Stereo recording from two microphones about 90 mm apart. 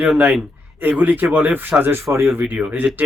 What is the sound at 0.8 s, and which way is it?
Speech, 20° right (ahead or behind).